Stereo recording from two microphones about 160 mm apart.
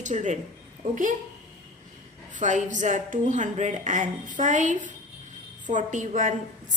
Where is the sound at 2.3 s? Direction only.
50° right (ahead or behind).